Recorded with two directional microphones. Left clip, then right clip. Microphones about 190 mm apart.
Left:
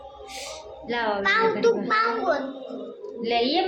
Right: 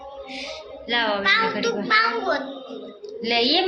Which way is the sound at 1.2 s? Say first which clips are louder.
Even; 50° left (ahead or behind).